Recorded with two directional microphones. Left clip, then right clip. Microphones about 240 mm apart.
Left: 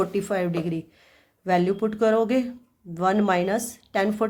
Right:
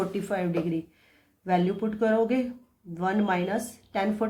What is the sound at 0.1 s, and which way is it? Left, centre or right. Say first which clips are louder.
Speech: left 4 dB; left.